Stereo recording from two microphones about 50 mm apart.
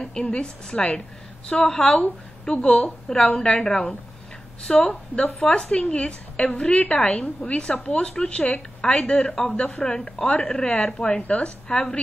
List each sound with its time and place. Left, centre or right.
0.3 s a woman's voice: centre
4.8 s a woman's voice: left
9.9 s a woman's voice: left